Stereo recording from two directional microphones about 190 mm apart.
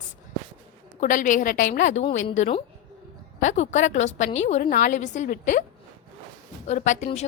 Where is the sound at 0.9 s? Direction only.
45° left (ahead or behind).